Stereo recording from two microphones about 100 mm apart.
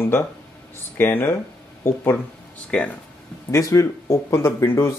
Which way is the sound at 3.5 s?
30° left (ahead or behind).